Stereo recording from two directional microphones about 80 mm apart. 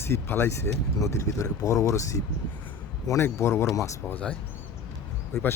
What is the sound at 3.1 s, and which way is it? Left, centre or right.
Speech, left.